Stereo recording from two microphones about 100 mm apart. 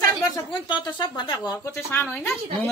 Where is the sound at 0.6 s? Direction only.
55° left (ahead or behind).